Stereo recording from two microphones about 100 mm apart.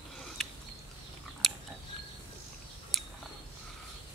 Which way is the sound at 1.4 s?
5° left (ahead or behind).